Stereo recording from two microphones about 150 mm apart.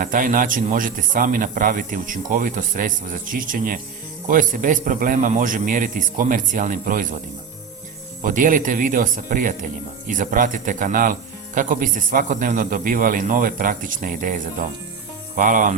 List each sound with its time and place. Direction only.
0.0 s speech: 65° right (ahead or behind)
8.2 s speech: 65° right (ahead or behind)